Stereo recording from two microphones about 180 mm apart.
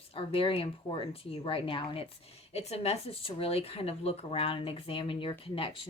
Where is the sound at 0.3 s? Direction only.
30° left (ahead or behind).